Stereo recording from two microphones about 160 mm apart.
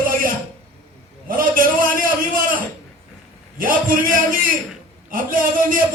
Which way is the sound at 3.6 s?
60° right (ahead or behind).